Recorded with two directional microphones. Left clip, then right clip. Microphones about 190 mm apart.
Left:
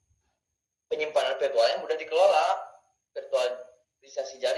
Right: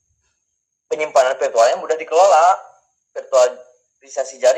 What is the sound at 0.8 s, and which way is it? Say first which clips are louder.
A man's voice: right 11 dB; 40° right (ahead or behind).